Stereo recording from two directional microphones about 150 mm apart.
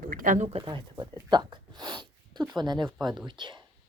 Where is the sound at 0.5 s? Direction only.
30° right (ahead or behind).